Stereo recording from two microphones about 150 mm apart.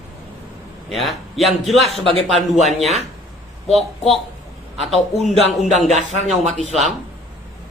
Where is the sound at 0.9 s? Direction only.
Centre (ahead or behind).